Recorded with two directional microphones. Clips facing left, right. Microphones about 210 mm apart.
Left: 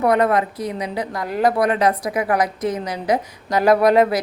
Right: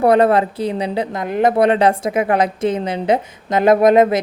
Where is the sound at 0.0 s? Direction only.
30° right (ahead or behind).